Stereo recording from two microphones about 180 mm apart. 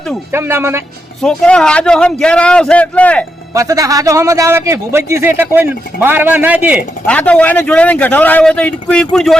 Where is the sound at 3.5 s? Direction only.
20° right (ahead or behind).